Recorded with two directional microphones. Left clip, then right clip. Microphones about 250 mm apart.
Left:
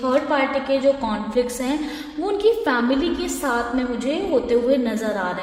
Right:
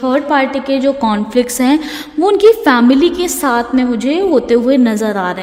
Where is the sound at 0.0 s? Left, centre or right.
Right.